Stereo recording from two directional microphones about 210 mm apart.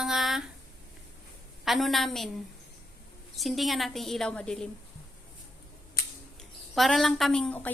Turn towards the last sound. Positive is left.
turn(degrees=5)  # may be behind; listen again after turning